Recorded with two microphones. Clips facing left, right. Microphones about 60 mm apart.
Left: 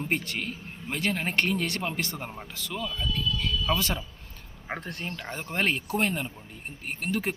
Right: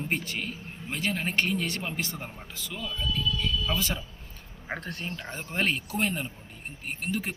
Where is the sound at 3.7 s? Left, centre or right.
Left.